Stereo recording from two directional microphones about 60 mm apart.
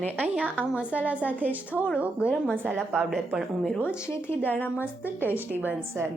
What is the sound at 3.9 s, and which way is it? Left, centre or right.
Speech, left.